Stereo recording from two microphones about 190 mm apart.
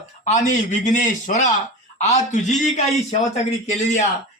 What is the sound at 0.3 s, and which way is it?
A man's voice, 40° left (ahead or behind).